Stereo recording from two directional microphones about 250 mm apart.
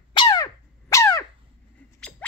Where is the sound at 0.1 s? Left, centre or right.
Centre.